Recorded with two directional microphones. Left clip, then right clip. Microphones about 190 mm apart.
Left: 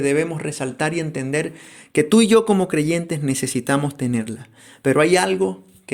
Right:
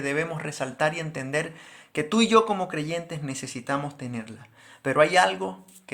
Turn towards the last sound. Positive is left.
turn(degrees=35)  # may be behind; listen again after turning